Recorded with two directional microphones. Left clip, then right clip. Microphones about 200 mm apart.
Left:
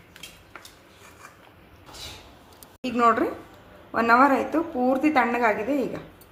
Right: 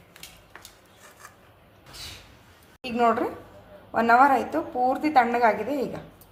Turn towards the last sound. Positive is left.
turn(degrees=0)  # may be behind; listen again after turning